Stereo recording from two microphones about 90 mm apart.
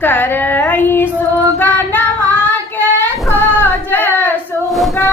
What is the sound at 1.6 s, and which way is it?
Child singing, 25° left (ahead or behind).